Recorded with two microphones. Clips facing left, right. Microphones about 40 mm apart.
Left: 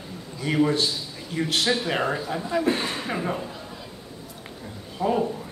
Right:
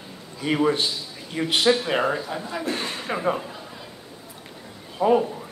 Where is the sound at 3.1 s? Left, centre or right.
Centre.